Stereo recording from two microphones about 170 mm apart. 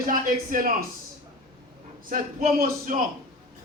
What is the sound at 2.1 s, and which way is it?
Speech, 55° right (ahead or behind).